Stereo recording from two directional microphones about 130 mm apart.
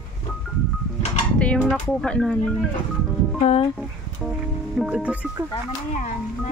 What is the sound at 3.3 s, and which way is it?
Speech, 55° left (ahead or behind).